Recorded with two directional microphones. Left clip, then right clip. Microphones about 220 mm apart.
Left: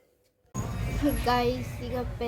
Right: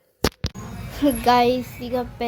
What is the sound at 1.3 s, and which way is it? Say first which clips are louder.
Speech: right 10 dB; 40° right (ahead or behind).